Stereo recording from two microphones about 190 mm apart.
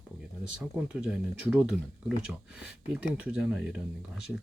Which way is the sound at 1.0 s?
5° right (ahead or behind).